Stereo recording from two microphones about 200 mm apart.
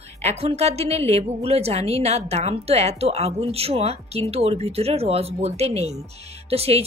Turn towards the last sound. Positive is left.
turn(degrees=-30)  # may be behind; listen again after turning